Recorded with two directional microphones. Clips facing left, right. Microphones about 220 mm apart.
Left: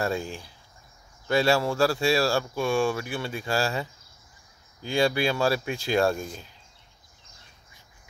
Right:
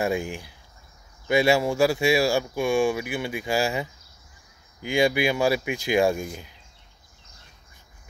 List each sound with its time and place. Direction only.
0.0 s speech: 15° right (ahead or behind)